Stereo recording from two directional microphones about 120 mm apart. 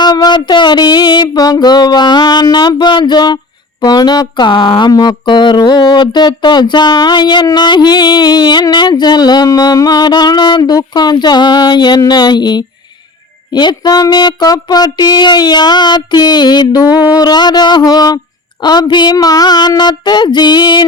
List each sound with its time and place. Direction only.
0.0 s speech: 35° left (ahead or behind)